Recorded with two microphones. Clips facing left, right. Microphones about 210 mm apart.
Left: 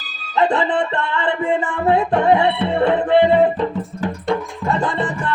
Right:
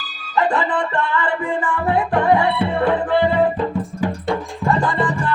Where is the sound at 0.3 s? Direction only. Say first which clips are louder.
Left 2 dB; 25° left (ahead or behind).